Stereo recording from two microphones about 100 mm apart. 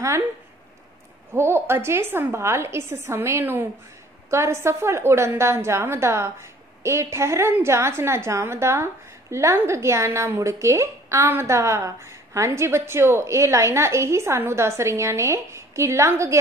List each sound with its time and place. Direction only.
1.3 s a woman's voice: 25° right (ahead or behind)